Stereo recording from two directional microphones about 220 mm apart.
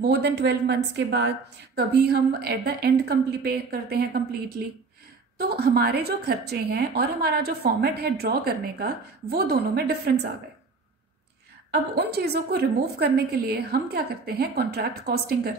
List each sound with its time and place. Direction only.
0.0 s a woman's voice: 50° right (ahead or behind)
11.7 s a woman's voice: 45° right (ahead or behind)